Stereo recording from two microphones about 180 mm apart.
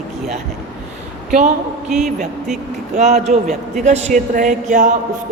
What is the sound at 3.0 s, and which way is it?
A woman's voice, 40° right (ahead or behind).